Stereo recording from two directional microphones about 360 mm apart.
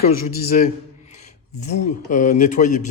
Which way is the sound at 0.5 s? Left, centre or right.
Centre.